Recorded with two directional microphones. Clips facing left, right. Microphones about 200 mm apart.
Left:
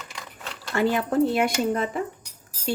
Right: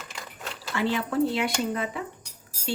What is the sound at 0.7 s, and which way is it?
Speech, 45° left (ahead or behind).